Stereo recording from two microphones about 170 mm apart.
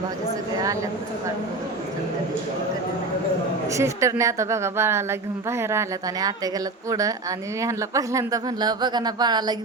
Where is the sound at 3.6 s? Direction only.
15° right (ahead or behind).